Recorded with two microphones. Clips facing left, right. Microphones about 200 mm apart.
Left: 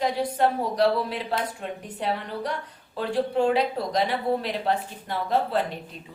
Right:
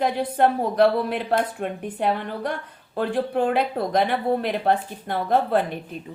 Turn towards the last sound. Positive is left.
turn(degrees=-55)  # may be behind; listen again after turning